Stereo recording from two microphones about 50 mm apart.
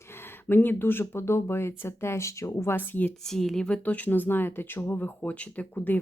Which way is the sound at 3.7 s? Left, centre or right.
Left.